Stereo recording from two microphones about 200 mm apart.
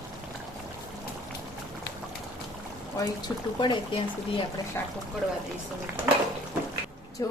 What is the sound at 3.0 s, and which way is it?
Speech, 20° left (ahead or behind).